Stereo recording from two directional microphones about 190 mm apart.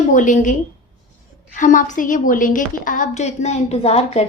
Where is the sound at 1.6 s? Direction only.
40° left (ahead or behind).